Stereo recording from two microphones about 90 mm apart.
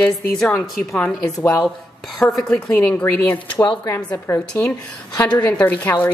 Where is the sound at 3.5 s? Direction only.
35° left (ahead or behind).